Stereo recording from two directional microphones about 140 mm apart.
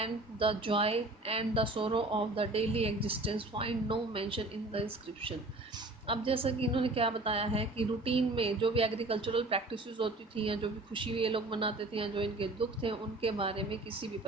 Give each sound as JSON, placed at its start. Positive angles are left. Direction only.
{"t": 0.0, "sound": "a woman's voice", "side_deg": -40}